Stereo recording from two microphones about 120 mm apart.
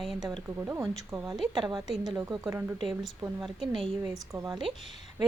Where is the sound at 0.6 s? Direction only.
20° right (ahead or behind).